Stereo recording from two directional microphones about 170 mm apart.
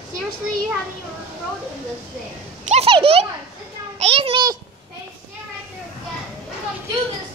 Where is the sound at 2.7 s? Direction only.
35° right (ahead or behind).